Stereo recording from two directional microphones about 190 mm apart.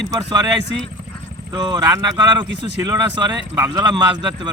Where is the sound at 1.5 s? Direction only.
20° right (ahead or behind).